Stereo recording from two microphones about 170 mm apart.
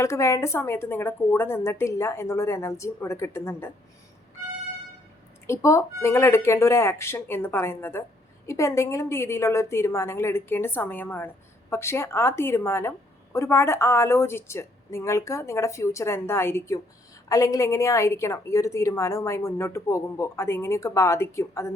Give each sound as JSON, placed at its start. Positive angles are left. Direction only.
{"t": 0.0, "sound": "a woman's voice", "side_deg": 15}
{"t": 5.5, "sound": "a woman's voice", "side_deg": 15}